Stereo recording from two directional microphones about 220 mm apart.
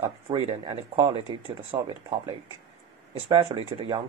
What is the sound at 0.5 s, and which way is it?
Speech, 20° right (ahead or behind).